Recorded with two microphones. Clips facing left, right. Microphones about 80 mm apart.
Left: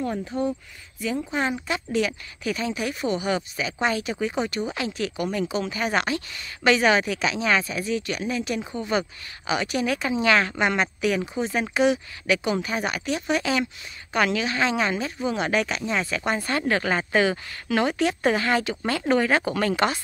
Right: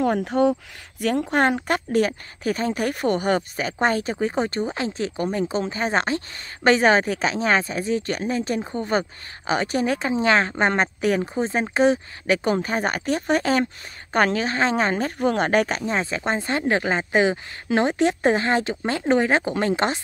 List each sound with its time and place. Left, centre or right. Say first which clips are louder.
0.0 s speech: right 7 dB; right
1.0 s speech: right 6 dB; right
16.2 s speech: right 1 dB; right